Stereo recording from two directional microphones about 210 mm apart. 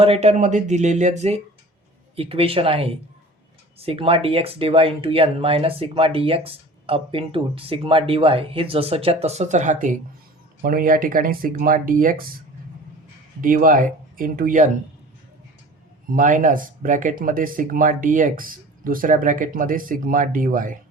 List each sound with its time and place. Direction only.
0.0 s speech: 30° right (ahead or behind)
13.4 s speech: 40° right (ahead or behind)
16.0 s speech: 40° right (ahead or behind)